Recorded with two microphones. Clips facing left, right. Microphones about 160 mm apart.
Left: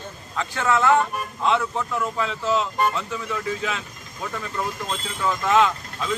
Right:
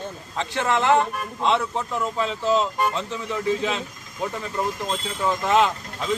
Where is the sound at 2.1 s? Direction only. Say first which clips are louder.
Right 3 dB; 25° right (ahead or behind).